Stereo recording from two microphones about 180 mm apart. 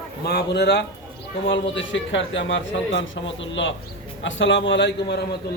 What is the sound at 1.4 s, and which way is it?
A man's voice, 85° left.